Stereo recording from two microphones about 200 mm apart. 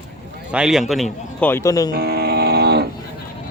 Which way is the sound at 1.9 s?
50° right (ahead or behind).